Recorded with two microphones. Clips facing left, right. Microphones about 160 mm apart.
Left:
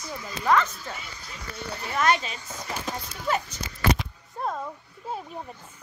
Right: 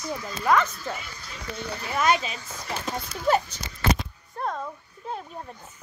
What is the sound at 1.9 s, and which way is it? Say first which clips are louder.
Speech: right 1 dB; 10° right (ahead or behind).